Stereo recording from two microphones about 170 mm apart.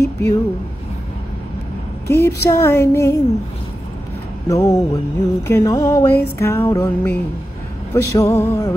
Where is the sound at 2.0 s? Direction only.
15° left (ahead or behind).